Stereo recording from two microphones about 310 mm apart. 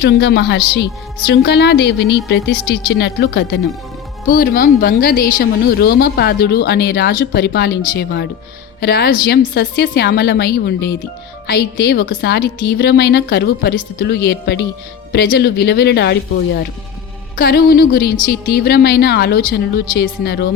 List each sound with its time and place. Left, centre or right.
0.0 s a woman's voice: left